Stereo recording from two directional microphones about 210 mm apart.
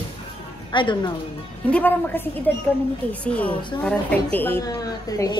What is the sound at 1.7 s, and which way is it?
Speech, 10° left (ahead or behind).